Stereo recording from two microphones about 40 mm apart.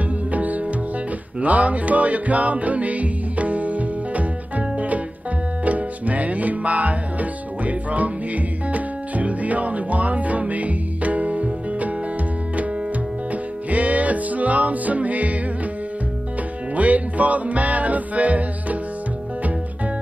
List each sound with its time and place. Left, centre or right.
0.3 s music: right
13.3 s music: right
16.7 s music: right